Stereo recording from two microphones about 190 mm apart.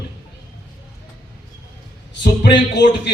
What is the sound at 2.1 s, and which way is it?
Speech, 65° left (ahead or behind).